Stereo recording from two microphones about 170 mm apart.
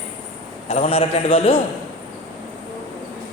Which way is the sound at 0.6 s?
35° left (ahead or behind).